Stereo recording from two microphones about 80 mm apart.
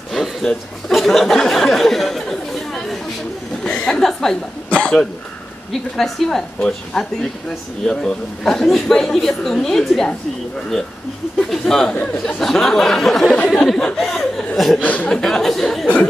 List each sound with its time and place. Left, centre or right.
0.1 s a sound: centre
0.5 s speech: centre
4.6 s cough: centre
5.7 s speech: centre
11.3 s speech: centre
11.9 s speech: centre
12.4 s speech: centre
14.8 s speech: centre
15.1 s speech: centre